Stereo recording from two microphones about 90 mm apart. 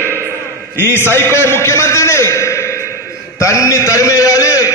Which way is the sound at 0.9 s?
25° left (ahead or behind).